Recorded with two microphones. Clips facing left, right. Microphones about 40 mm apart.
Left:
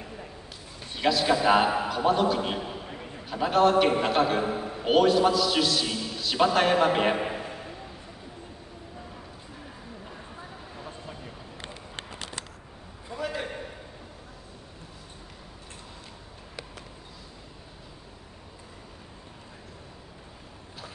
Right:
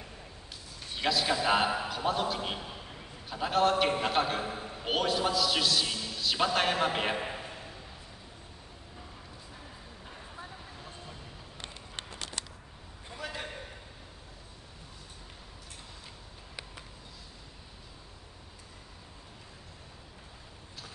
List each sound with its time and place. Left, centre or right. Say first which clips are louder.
0.7 s a man's voice: left 5 dB; centre
2.9 s a sound: left 7 dB; left
3.3 s a man's voice: left 5 dB; centre
4.4 s a man's voice: left 7 dB; centre
4.8 s a man's voice: left 9 dB; centre
5.9 s music: left 4 dB; centre
6.2 s a man's voice: left 5 dB; centre
7.2 s a sound: left 6 dB; centre
10.8 s vehicle: left 6 dB; left
13.2 s a sound: left 7 dB; centre